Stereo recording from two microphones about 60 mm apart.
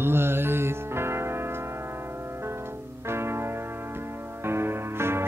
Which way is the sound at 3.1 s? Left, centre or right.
Right.